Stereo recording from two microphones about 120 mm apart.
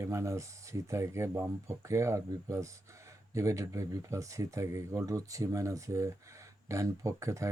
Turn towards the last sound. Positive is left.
turn(degrees=-25)  # may be behind; listen again after turning